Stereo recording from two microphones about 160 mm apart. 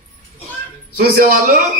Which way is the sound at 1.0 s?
65° right (ahead or behind).